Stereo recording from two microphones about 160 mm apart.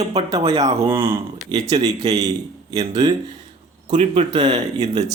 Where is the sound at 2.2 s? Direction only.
20° right (ahead or behind).